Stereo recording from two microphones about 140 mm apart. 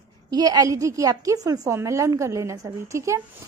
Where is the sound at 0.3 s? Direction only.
25° right (ahead or behind).